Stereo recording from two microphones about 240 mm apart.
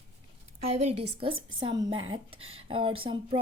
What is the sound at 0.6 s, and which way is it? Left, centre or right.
Speech, right.